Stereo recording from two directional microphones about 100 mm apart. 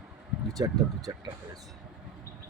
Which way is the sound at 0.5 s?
40° right (ahead or behind).